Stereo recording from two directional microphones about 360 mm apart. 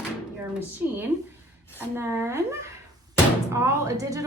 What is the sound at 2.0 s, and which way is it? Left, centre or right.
A woman's voice, centre.